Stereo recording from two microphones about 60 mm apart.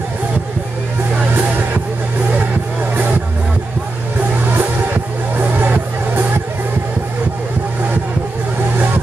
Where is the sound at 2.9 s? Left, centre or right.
Right.